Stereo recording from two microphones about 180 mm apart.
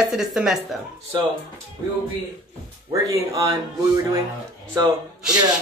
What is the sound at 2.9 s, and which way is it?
Speech, 20° right (ahead or behind).